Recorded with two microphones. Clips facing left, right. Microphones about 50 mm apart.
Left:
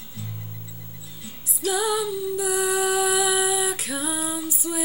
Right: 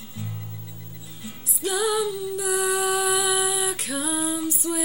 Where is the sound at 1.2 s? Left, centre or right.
Centre.